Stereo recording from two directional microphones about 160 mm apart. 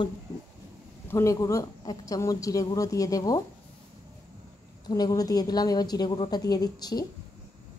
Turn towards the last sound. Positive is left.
turn(degrees=25)  # may be behind; listen again after turning